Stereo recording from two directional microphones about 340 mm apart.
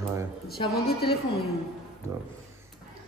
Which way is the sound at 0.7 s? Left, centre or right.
Left.